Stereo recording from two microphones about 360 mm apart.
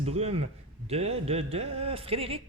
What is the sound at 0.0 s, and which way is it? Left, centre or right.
Speech, centre.